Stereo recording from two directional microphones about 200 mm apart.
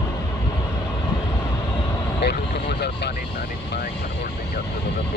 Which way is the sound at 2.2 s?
55° left (ahead or behind).